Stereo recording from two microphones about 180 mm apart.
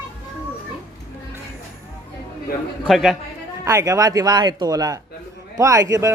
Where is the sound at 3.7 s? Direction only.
15° right (ahead or behind).